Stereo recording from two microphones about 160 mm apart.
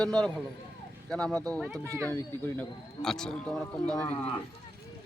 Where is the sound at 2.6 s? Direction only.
5° left (ahead or behind).